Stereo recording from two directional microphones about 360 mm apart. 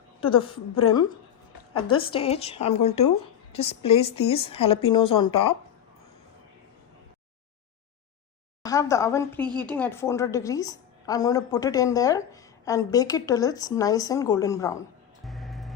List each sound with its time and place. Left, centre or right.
0.2 s a woman's voice: centre
8.6 s a woman's voice: centre